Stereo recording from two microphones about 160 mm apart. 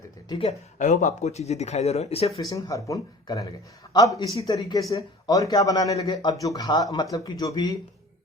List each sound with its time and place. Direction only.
0.3 s speech: 35° left (ahead or behind)
0.8 s speech: 50° left (ahead or behind)
2.4 s speech: 20° left (ahead or behind)